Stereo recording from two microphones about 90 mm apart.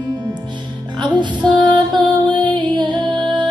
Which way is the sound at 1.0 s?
55° right (ahead or behind).